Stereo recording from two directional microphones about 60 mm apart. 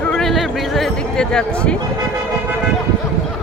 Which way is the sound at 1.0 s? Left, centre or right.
Centre.